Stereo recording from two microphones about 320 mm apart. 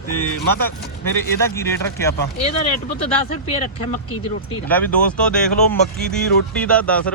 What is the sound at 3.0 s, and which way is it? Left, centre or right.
Speech, centre.